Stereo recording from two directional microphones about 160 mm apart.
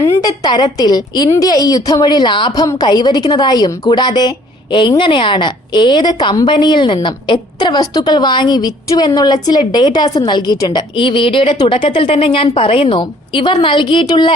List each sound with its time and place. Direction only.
0.0 s a woman's voice: 20° left (ahead or behind)